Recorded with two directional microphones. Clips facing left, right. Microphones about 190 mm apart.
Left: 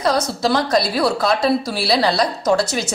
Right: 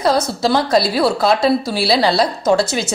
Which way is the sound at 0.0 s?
30° right (ahead or behind).